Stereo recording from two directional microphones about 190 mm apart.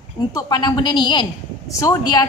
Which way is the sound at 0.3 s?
20° left (ahead or behind).